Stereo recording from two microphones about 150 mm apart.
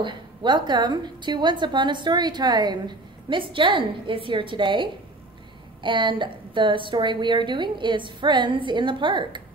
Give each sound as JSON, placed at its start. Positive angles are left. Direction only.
{"t": 0.0, "sound": "a woman's voice", "side_deg": -30}